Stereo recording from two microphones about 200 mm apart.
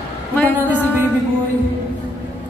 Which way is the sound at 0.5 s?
10° right (ahead or behind).